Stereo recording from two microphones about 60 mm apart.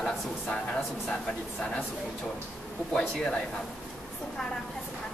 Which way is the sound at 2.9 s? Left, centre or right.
Centre.